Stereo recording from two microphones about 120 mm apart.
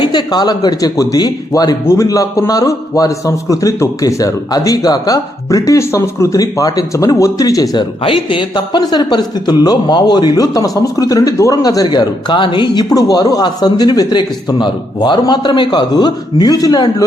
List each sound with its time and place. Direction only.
0.0 s a man's voice: 40° left (ahead or behind)
8.0 s a man's voice: 45° left (ahead or behind)